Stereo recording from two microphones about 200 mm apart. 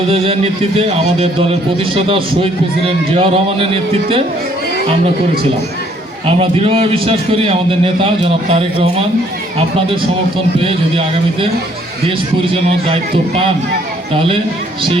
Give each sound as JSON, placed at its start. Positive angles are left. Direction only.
{"t": 0.1, "sound": "a man's voice", "side_deg": -30}
{"t": 6.2, "sound": "a man's voice", "side_deg": -30}